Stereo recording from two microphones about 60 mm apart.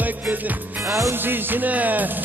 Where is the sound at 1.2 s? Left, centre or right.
Right.